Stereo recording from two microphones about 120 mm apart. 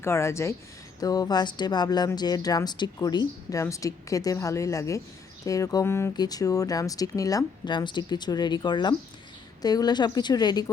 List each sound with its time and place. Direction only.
0.0 s speech: 20° left (ahead or behind)
6.1 s speech: 30° left (ahead or behind)